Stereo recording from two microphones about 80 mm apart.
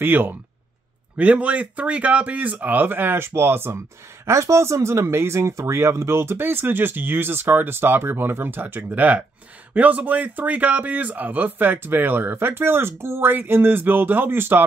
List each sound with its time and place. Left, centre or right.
0.0 s speech: right